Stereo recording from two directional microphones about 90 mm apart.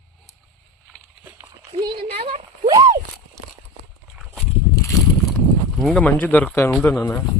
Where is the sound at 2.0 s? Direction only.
90° right.